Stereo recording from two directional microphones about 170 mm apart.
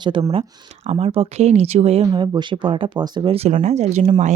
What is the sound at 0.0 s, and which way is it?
A woman's voice, 25° right (ahead or behind).